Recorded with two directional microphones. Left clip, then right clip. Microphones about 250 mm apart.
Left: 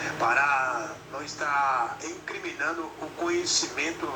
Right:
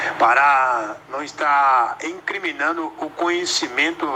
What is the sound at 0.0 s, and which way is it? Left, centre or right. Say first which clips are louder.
A man's voice: right 9 dB; right.